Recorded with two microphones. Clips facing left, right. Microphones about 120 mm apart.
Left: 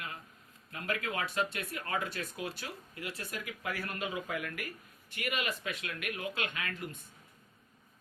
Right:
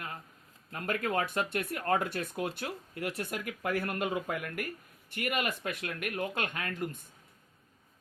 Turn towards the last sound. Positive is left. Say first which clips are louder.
# right 4 dB
turn(degrees=-45)  # may be behind; listen again after turning